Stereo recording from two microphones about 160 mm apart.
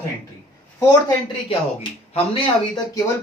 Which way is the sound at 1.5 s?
35° left (ahead or behind).